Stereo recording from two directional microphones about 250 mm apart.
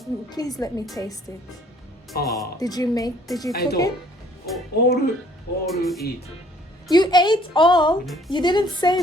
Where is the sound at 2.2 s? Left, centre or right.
Centre.